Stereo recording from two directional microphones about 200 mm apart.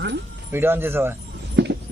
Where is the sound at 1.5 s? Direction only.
60° right (ahead or behind).